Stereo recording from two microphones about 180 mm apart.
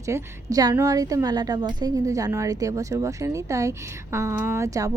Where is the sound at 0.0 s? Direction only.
15° right (ahead or behind).